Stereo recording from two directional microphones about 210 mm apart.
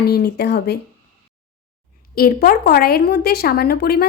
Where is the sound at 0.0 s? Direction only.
50° left (ahead or behind).